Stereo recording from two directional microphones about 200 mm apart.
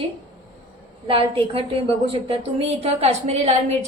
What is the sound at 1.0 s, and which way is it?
A woman's voice, 25° right (ahead or behind).